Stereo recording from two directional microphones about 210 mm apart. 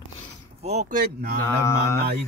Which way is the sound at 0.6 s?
35° right (ahead or behind).